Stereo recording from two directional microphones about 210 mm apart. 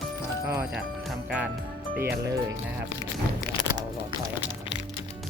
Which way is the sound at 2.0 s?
10° right (ahead or behind).